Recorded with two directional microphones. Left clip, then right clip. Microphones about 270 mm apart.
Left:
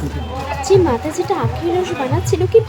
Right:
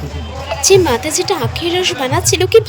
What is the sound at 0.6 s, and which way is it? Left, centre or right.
A woman's voice, right.